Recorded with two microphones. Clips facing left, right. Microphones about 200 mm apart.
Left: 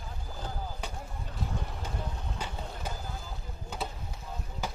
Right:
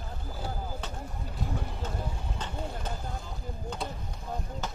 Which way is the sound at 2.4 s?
10° left (ahead or behind).